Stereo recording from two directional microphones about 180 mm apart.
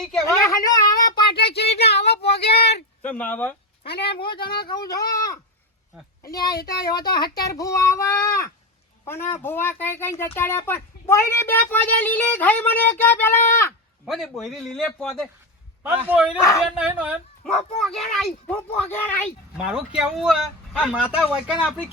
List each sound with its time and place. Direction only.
0.0 s speech: centre (ahead or behind)
0.3 s a sound: 15° left (ahead or behind)
1.4 s a sound: 65° left (ahead or behind)
3.0 s speech: 10° left (ahead or behind)
3.8 s a woman's voice: 65° left (ahead or behind)
4.9 s speech: 20° left (ahead or behind)
6.6 s a woman's voice: 60° left (ahead or behind)
7.2 s speech: 20° left (ahead or behind)
14.0 s a man's voice: centre (ahead or behind)
20.0 s speech: centre (ahead or behind)